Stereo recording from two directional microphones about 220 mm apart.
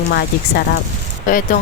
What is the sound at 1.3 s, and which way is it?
Speech, 40° left (ahead or behind).